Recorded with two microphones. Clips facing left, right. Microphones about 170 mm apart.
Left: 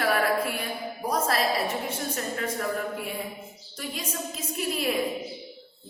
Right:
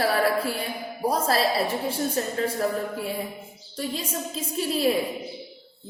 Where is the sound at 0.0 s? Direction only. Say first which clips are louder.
Right 2 dB; 30° right (ahead or behind).